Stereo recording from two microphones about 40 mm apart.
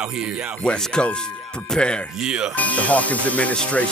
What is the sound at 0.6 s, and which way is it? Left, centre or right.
Speech, left.